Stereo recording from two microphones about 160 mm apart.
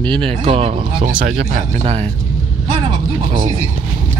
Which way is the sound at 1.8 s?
40° right (ahead or behind).